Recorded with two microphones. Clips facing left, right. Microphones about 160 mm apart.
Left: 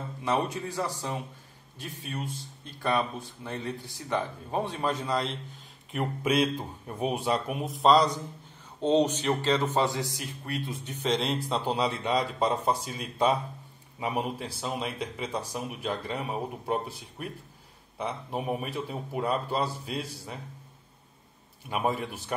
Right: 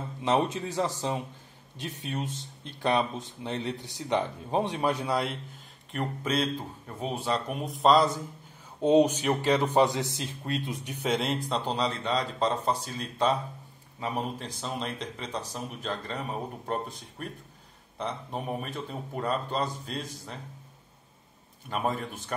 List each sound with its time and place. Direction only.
0.7 s a man's voice: 20° right (ahead or behind)
5.9 s a man's voice: 5° left (ahead or behind)
21.6 s a man's voice: 10° left (ahead or behind)